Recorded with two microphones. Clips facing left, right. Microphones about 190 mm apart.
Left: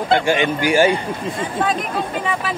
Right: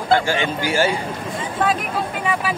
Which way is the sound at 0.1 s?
20° left (ahead or behind).